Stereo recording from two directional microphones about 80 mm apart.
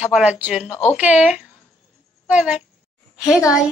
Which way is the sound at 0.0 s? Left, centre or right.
Centre.